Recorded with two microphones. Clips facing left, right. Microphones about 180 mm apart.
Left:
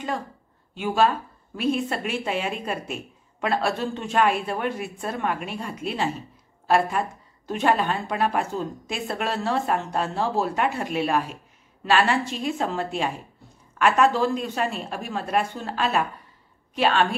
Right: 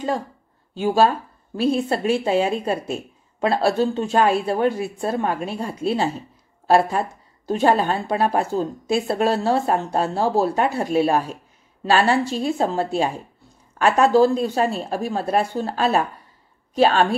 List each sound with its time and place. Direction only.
0.7 s speech: 35° right (ahead or behind)